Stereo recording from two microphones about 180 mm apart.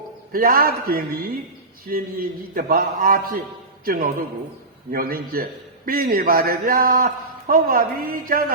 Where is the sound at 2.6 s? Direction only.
55° right (ahead or behind).